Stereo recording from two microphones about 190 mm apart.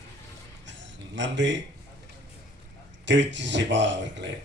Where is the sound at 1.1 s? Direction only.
70° right (ahead or behind).